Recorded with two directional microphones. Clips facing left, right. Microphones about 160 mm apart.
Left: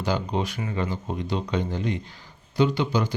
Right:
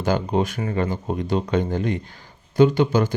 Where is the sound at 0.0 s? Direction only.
50° right (ahead or behind).